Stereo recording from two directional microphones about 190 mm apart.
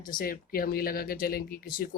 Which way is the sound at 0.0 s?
50° left (ahead or behind).